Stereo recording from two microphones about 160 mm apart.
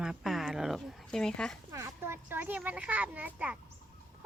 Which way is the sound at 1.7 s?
15° right (ahead or behind).